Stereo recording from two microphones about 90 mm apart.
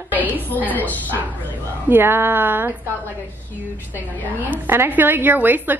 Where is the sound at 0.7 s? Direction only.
20° left (ahead or behind).